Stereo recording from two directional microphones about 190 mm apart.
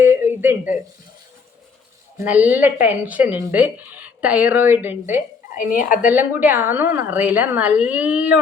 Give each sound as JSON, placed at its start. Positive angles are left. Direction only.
{"t": 0.0, "sound": "a sound", "side_deg": -10}
{"t": 2.1, "sound": "speech", "side_deg": -10}
{"t": 5.5, "sound": "a woman's voice", "side_deg": 45}
{"t": 6.1, "sound": "speech", "side_deg": -10}